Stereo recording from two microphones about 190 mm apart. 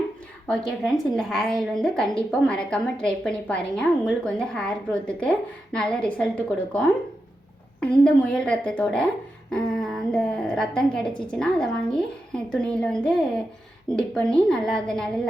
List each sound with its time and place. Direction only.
0.4 s a woman's voice: 5° left (ahead or behind)